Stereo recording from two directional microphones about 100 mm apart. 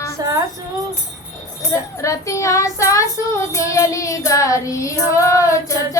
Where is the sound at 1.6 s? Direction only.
30° left (ahead or behind).